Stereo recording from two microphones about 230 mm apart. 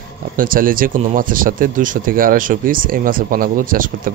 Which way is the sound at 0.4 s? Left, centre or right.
Right.